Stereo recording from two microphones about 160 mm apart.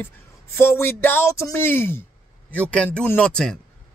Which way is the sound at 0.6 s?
15° left (ahead or behind).